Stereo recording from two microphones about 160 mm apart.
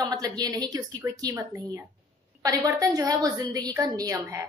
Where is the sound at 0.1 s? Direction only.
25° right (ahead or behind).